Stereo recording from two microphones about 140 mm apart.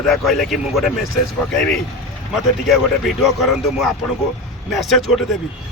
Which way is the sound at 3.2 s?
Centre (ahead or behind).